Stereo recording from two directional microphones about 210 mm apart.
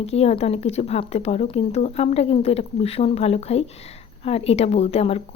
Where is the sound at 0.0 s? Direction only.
30° left (ahead or behind).